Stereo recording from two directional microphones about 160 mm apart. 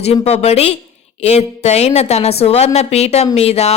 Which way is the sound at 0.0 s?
40° left (ahead or behind).